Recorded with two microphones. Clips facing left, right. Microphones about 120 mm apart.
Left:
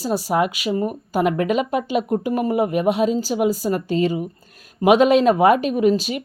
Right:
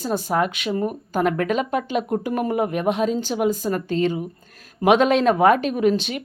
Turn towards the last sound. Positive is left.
turn(degrees=5)  # may be behind; listen again after turning